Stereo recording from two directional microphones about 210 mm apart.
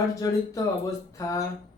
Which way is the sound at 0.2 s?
15° left (ahead or behind).